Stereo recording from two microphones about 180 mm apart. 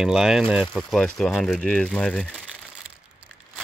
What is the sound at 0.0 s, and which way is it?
Speech, 5° right (ahead or behind).